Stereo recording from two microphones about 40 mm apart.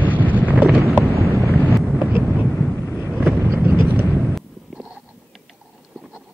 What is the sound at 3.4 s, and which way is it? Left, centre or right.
Vehicle, right.